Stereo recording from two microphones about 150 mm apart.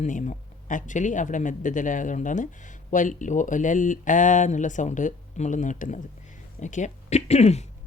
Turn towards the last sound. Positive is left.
turn(degrees=45)  # may be behind; listen again after turning